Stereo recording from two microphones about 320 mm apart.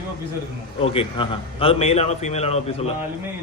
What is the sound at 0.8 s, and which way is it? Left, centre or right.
A man's voice, centre.